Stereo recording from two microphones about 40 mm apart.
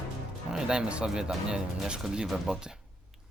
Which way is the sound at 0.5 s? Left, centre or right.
Right.